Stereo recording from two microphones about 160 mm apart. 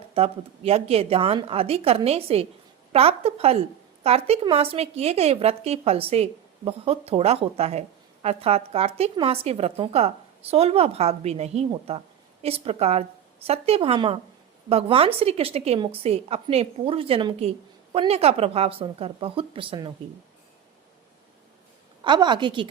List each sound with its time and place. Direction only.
0.1 s a woman's voice: 40° right (ahead or behind)
22.0 s a woman's voice: 30° right (ahead or behind)